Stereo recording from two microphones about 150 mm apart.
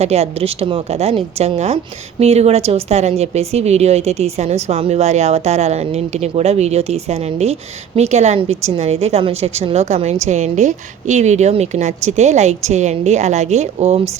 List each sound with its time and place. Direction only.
0.0 s a woman's voice: 45° right (ahead or behind)